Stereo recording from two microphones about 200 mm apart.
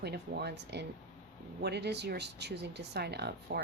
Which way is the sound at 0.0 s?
55° right (ahead or behind).